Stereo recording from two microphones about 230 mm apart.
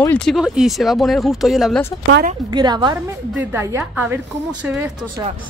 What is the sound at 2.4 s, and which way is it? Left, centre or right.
Speech, centre.